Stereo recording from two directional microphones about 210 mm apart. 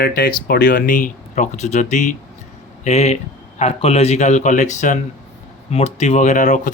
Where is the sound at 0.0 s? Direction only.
45° left (ahead or behind).